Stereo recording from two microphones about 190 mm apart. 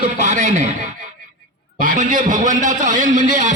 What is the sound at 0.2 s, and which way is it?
Speech, 40° right (ahead or behind).